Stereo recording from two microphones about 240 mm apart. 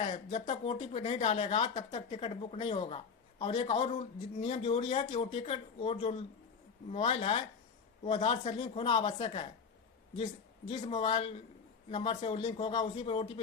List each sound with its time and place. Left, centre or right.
0.0 s speech: left
10.7 s speech: left